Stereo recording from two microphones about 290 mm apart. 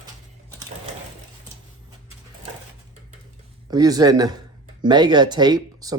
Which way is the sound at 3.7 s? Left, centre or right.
Centre.